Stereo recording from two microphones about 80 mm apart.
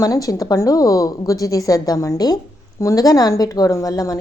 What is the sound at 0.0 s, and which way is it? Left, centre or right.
A woman's voice, left.